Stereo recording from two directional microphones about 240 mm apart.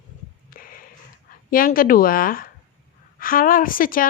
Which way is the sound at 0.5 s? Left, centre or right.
Left.